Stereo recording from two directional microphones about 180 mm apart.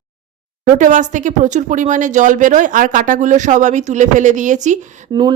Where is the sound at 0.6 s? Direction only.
45° right (ahead or behind).